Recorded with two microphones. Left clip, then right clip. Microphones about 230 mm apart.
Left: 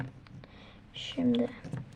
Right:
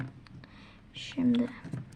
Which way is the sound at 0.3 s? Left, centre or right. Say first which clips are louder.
Even; centre.